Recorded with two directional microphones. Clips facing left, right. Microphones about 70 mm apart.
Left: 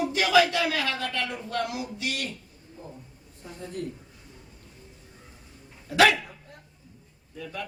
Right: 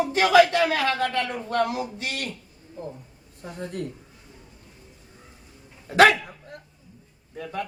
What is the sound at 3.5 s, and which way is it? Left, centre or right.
Speech, right.